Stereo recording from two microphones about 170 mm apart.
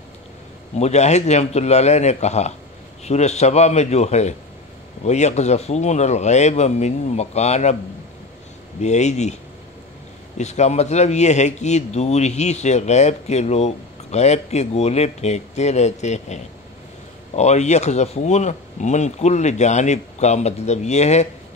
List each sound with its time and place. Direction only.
0.7 s speech: 40° left (ahead or behind)
8.8 s speech: 40° left (ahead or behind)
17.4 s speech: 40° left (ahead or behind)